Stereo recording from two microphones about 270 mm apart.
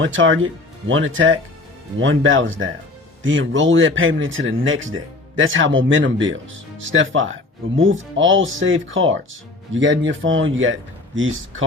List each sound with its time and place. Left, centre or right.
0.0 s a man's voice: right